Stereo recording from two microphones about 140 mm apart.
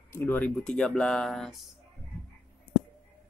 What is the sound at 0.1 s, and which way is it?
Speech, 10° left (ahead or behind).